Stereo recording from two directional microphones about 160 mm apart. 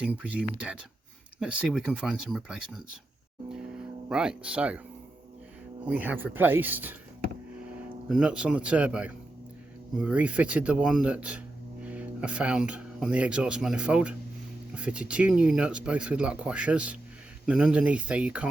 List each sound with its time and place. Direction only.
0.0 s speech: 5° right (ahead or behind)
4.1 s speech: 5° right (ahead or behind)
5.9 s speech: 10° right (ahead or behind)
8.1 s speech: 5° right (ahead or behind)